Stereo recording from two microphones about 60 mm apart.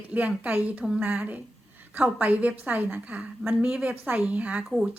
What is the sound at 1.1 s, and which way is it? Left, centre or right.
A woman's voice, right.